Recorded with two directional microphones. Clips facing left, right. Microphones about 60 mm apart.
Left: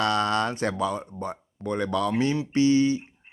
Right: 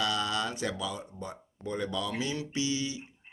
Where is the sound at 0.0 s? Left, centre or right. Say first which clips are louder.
Left 7 dB; left.